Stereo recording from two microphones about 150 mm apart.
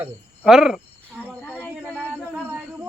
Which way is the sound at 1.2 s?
10° left (ahead or behind).